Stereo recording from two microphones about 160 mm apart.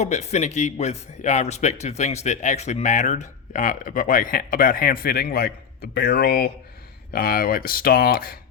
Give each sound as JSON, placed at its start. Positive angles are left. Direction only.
{"t": 0.0, "sound": "speech", "side_deg": 45}